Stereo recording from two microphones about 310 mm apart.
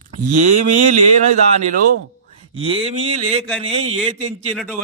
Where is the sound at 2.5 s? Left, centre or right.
Centre.